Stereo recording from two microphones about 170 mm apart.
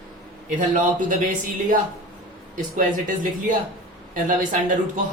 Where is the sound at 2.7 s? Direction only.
50° right (ahead or behind).